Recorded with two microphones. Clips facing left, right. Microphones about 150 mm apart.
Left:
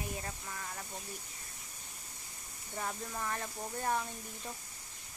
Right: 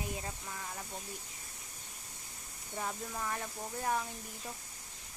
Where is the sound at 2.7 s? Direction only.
5° right (ahead or behind).